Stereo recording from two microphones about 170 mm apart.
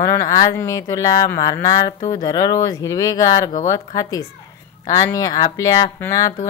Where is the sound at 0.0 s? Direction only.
20° left (ahead or behind).